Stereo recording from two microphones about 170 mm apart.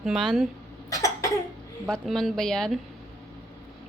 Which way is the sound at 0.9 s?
20° left (ahead or behind).